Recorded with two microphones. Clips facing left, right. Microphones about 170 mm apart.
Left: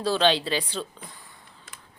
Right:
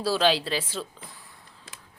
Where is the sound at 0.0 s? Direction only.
5° right (ahead or behind).